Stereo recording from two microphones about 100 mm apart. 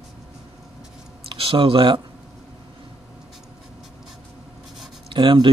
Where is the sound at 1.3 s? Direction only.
65° right (ahead or behind).